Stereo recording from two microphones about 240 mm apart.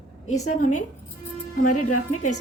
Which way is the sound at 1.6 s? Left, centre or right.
Left.